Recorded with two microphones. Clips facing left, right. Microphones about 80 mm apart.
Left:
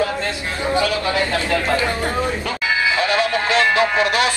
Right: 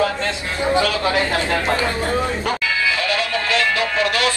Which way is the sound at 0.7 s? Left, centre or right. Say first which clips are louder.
Even; right.